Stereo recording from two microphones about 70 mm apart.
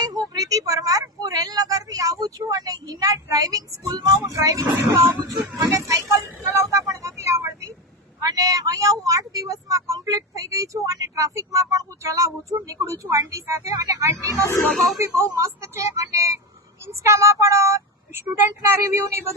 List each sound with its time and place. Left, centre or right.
0.0 s a sound: right
4.0 s speech: right
6.4 s vehicle: right
8.2 s speech: right
14.7 s speech: centre
14.9 s speech: right